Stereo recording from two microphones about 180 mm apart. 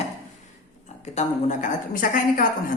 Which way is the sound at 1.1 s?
40° left (ahead or behind).